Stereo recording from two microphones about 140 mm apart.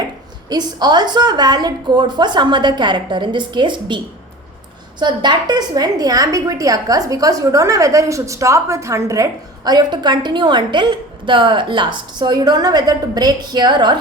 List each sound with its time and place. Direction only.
0.5 s a woman's voice: 30° right (ahead or behind)